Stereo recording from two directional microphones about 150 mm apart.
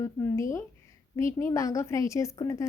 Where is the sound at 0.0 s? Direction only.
20° left (ahead or behind).